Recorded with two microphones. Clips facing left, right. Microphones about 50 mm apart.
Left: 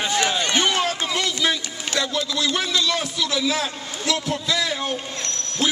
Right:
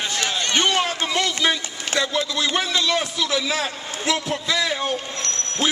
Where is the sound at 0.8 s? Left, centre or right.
Centre.